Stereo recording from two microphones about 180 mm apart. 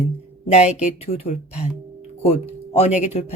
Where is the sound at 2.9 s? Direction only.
40° left (ahead or behind).